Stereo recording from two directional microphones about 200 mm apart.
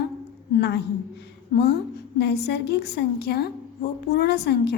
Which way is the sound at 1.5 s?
55° left (ahead or behind).